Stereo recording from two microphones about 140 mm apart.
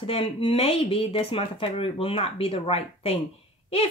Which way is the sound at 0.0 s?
45° left (ahead or behind).